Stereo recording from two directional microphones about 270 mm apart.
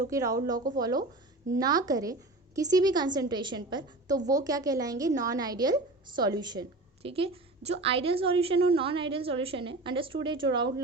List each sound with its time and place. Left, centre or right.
0.1 s a woman's voice: centre